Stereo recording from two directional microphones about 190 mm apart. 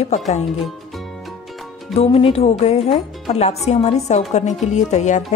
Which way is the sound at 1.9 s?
30° left (ahead or behind).